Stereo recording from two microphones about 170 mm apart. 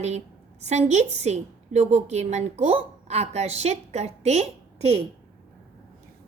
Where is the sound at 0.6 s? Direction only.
40° right (ahead or behind).